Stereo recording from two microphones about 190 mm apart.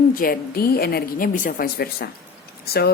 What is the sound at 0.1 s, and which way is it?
A woman's voice, 50° left (ahead or behind).